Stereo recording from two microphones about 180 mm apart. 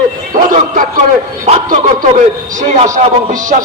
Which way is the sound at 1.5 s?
40° right (ahead or behind).